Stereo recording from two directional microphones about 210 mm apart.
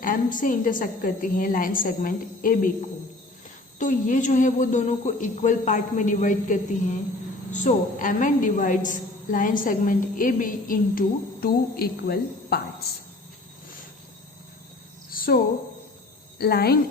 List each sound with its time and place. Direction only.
0.0 s a woman's voice: 40° left (ahead or behind)
3.8 s a woman's voice: 40° left (ahead or behind)
15.1 s a sound: 45° left (ahead or behind)
16.4 s a woman's voice: 50° left (ahead or behind)